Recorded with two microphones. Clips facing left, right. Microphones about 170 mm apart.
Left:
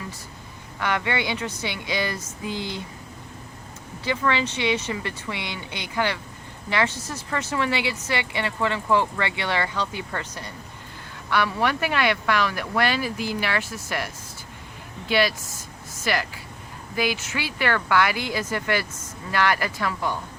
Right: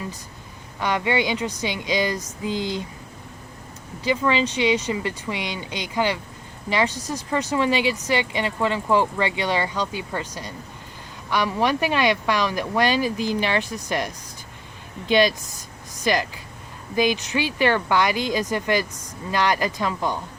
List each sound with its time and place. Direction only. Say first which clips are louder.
0.8 s speech: right 3 dB; 15° right (ahead or behind)
4.0 s speech: right 3 dB; 15° right (ahead or behind)